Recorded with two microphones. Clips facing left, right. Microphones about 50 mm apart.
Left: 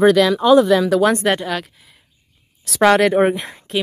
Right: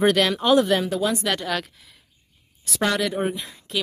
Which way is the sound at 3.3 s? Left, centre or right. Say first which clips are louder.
Left 8 dB; left.